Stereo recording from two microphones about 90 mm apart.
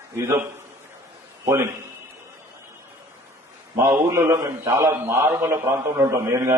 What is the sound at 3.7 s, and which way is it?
A man's voice, 30° right (ahead or behind).